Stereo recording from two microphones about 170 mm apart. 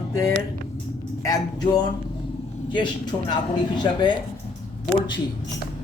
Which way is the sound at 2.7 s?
25° left (ahead or behind).